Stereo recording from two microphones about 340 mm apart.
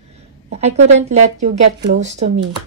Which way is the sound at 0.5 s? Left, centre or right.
Centre.